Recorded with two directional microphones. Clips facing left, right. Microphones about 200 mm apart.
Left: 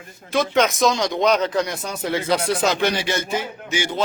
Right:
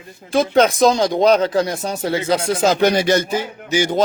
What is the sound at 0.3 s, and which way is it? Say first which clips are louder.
A man's voice: right 5 dB; 30° right (ahead or behind).